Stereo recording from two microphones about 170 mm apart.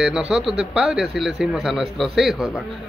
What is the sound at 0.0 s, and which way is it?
Speech, 5° right (ahead or behind).